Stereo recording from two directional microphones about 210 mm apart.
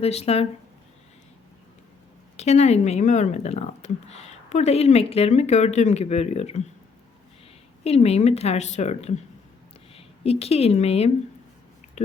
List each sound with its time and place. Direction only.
0.0 s speech: 30° left (ahead or behind)
2.3 s speech: 30° left (ahead or behind)
7.9 s speech: 30° left (ahead or behind)